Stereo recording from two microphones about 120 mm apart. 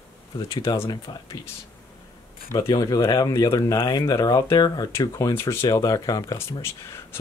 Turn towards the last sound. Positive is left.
turn(degrees=20)  # may be behind; listen again after turning